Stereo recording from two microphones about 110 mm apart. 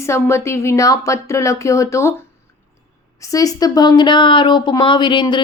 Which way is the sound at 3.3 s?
35° left (ahead or behind).